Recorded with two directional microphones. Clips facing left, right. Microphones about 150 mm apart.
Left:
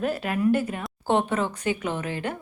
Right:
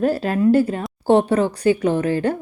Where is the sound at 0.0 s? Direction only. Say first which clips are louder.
Right 7 dB; 30° right (ahead or behind).